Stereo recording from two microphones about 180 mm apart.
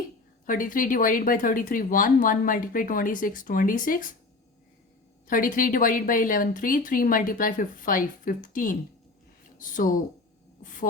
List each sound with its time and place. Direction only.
0.4 s speech: 50° left (ahead or behind)
5.3 s speech: 50° left (ahead or behind)
10.6 s a sound: 45° left (ahead or behind)